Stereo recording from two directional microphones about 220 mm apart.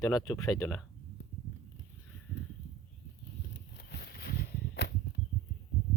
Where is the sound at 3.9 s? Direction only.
45° left (ahead or behind).